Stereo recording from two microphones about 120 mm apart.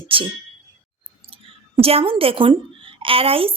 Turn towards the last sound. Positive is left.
turn(degrees=-50)  # may be behind; listen again after turning